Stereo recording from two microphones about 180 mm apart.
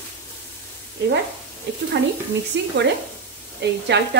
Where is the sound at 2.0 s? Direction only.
90° right.